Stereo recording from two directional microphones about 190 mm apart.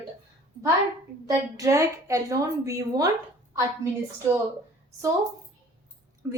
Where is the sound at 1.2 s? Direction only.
15° right (ahead or behind).